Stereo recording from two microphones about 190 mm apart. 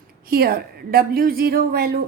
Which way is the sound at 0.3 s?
55° right (ahead or behind).